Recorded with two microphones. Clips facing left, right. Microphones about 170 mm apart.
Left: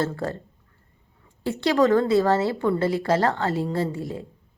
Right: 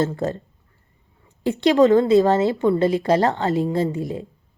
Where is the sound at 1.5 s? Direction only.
20° right (ahead or behind).